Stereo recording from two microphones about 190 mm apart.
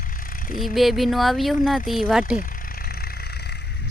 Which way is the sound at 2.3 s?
50° left (ahead or behind).